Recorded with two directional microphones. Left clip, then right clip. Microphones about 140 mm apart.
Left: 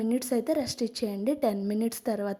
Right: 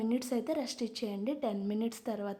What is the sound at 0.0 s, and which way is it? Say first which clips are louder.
A woman's voice: left 6 dB; 25° left (ahead or behind).